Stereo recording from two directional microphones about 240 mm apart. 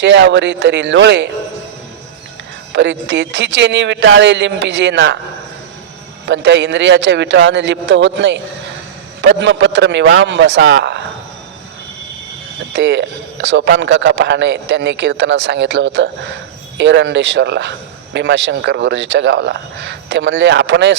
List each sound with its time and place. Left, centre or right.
0.0 s a man's voice: right
2.7 s a man's voice: right
6.2 s a man's voice: right
12.7 s a man's voice: right